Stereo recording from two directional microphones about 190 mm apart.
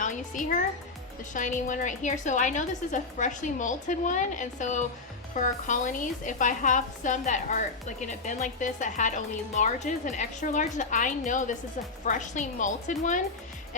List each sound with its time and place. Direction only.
0.0 s a woman's voice: 40° left (ahead or behind)